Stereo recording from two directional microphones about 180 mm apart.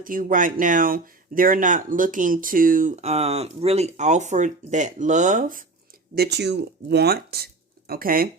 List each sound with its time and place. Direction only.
0.0 s speech: 50° right (ahead or behind)
6.1 s speech: 65° right (ahead or behind)